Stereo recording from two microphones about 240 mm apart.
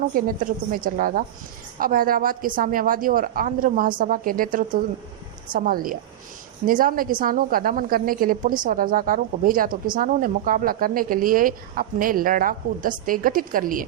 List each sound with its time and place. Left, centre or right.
0.1 s a woman's voice: right
5.5 s a woman's voice: right